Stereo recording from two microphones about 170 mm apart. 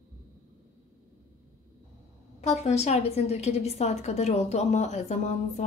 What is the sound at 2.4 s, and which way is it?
A woman's voice, 40° left (ahead or behind).